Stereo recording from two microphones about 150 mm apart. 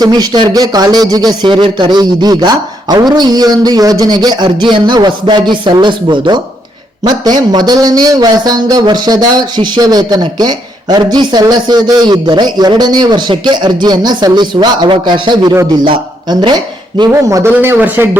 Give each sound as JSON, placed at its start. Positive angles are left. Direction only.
{"t": 0.0, "sound": "a man's voice", "side_deg": -25}